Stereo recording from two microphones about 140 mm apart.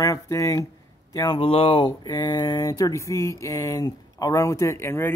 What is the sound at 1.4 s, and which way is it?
Speech, 40° left (ahead or behind).